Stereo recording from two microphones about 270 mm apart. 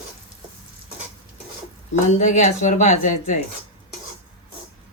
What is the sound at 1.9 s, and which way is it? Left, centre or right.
Speech, left.